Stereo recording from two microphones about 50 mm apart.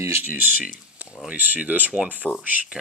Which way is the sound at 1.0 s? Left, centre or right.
Right.